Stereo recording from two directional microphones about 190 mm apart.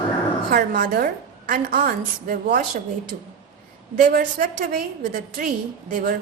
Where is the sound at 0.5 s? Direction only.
45° right (ahead or behind).